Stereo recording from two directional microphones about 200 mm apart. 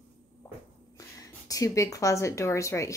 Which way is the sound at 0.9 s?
15° left (ahead or behind).